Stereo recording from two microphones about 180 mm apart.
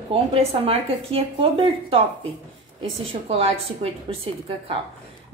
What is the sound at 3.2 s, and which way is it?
A woman's voice, 35° right (ahead or behind).